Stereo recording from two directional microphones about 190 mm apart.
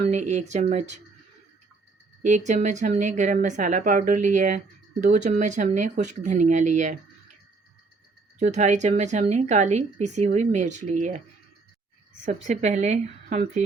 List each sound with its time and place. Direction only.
0.0 s speech: 40° right (ahead or behind)
2.2 s speech: 40° right (ahead or behind)
8.4 s speech: 40° right (ahead or behind)
12.2 s speech: 40° right (ahead or behind)